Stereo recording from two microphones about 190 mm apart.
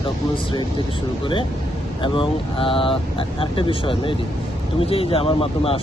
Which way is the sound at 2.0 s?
25° left (ahead or behind).